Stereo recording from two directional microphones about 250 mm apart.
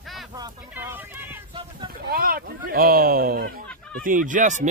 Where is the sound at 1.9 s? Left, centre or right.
Right.